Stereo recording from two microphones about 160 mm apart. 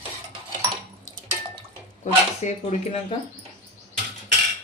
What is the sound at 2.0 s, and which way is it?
Speech, 50° left (ahead or behind).